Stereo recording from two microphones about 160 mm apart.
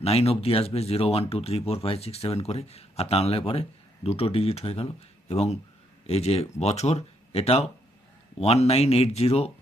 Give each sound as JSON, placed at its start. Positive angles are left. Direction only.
{"t": 0.0, "sound": "speech", "side_deg": 40}